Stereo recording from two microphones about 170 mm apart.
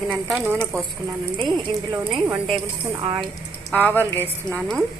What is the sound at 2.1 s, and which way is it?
Speech, centre (ahead or behind).